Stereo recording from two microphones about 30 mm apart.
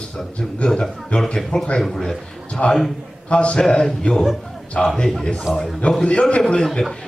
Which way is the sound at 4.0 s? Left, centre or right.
Left.